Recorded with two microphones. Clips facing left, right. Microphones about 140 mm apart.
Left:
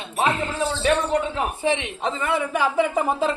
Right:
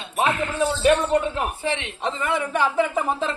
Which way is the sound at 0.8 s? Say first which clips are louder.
Right 2 dB; 5° right (ahead or behind).